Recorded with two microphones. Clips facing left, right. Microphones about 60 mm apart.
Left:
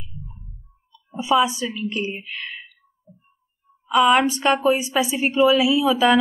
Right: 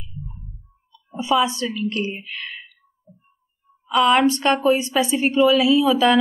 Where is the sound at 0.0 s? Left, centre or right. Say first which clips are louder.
Right 3 dB; centre.